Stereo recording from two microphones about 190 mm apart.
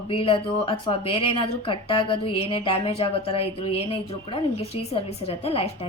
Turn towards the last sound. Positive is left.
turn(degrees=30)  # may be behind; listen again after turning